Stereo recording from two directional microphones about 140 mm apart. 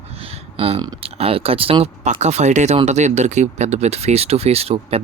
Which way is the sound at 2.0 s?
55° right (ahead or behind).